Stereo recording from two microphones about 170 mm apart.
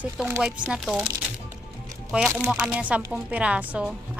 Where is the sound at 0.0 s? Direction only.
5° right (ahead or behind).